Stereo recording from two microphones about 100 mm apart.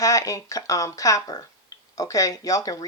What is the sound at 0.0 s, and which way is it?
Speech, 35° left (ahead or behind).